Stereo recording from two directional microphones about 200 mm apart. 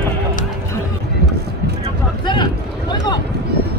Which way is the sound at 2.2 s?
20° left (ahead or behind).